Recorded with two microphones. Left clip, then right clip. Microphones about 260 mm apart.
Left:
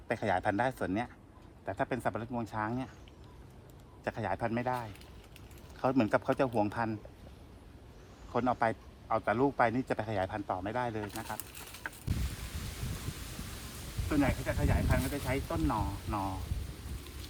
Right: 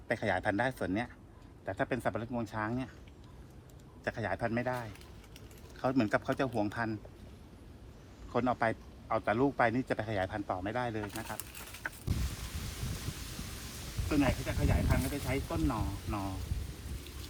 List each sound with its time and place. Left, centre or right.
0.1 s speech: centre
4.0 s speech: centre
8.3 s speech: centre
14.1 s speech: centre